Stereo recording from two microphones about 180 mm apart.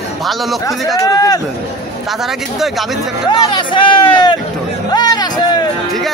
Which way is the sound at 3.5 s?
25° left (ahead or behind).